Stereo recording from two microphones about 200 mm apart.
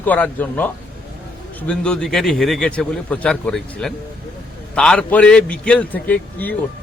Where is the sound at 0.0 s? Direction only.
10° left (ahead or behind).